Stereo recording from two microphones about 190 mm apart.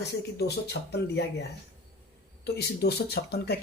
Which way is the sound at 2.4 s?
60° left (ahead or behind).